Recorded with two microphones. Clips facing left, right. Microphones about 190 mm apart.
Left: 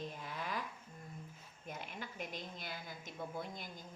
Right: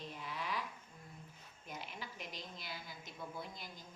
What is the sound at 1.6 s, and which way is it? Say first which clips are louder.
A woman's voice: left 2 dB; 50° left (ahead or behind).